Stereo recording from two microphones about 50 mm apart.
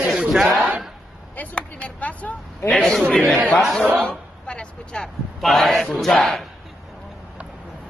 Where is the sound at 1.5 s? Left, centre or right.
Left.